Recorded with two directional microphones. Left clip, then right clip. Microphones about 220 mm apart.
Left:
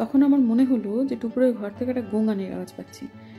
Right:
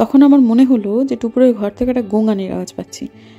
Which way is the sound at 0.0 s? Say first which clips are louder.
Right 10 dB; 30° right (ahead or behind).